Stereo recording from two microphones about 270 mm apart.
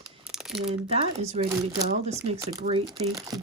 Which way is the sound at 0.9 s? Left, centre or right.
Right.